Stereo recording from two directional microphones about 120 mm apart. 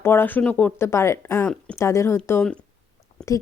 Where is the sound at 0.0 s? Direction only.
20° left (ahead or behind).